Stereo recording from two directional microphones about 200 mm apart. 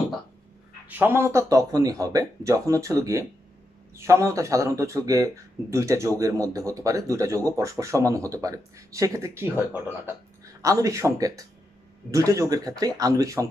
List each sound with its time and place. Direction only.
0.8 s speech: 10° right (ahead or behind)